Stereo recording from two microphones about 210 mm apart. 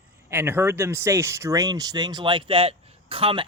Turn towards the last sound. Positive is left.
turn(degrees=-25)  # may be behind; listen again after turning